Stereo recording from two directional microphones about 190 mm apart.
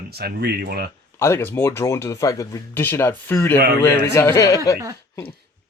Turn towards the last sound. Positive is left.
turn(degrees=20)  # may be behind; listen again after turning